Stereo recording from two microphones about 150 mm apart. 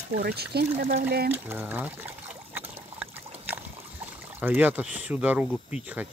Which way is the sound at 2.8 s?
15° right (ahead or behind).